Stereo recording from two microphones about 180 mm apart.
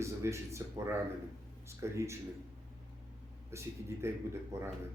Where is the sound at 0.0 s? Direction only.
15° right (ahead or behind).